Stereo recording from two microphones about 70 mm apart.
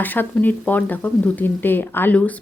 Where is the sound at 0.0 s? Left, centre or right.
Left.